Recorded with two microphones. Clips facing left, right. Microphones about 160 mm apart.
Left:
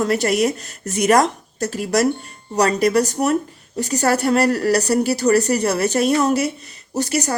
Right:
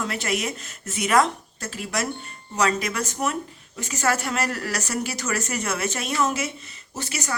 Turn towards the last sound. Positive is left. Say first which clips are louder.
# left 11 dB
turn(degrees=40)  # may be behind; listen again after turning